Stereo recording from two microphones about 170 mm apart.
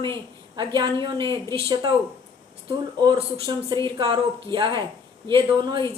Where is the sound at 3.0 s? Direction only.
25° right (ahead or behind).